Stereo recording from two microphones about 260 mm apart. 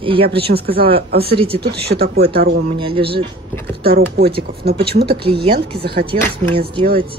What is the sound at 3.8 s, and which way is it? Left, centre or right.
Speech, right.